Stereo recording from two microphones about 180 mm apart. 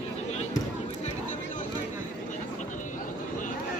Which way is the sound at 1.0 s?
45° left (ahead or behind).